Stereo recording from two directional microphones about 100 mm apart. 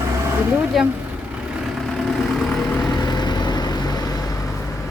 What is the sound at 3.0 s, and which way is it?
Vehicle, 45° left (ahead or behind).